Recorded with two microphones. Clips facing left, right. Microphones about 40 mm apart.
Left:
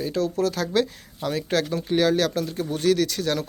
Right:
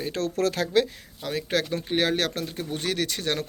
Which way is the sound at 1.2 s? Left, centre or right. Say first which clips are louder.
Left 3 dB; centre.